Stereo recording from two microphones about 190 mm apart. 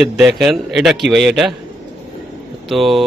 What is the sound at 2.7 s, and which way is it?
Speech, centre (ahead or behind).